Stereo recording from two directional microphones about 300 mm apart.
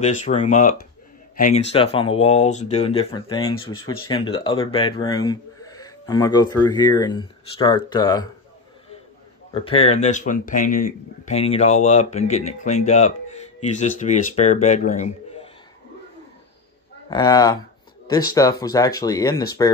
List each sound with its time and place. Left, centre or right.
0.0 s speech: left
9.5 s speech: centre
17.1 s speech: centre